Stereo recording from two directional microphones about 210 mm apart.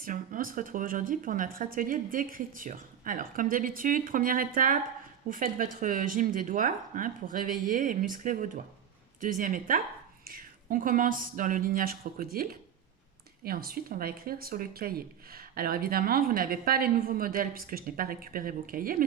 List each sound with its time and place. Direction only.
0.0 s speech: 40° right (ahead or behind)